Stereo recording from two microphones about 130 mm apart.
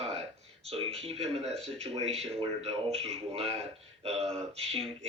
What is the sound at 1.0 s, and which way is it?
Speech, 50° right (ahead or behind).